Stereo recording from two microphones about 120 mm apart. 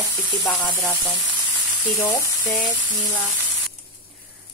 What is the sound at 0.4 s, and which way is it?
Speech, 30° left (ahead or behind).